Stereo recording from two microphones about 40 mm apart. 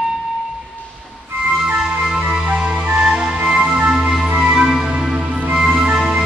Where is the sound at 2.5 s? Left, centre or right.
Right.